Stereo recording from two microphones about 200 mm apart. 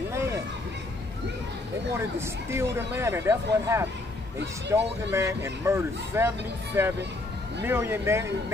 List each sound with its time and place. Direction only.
2.0 s speech: 15° right (ahead or behind)